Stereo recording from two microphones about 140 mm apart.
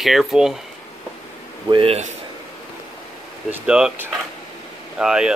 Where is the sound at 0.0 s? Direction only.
Centre (ahead or behind).